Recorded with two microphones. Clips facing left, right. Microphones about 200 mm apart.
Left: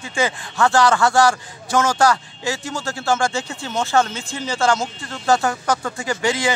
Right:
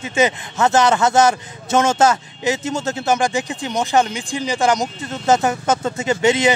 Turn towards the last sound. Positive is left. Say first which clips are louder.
# right 5 dB
turn(degrees=-20)  # may be behind; listen again after turning